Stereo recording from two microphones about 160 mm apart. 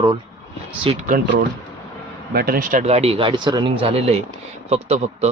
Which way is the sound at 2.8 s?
40° right (ahead or behind).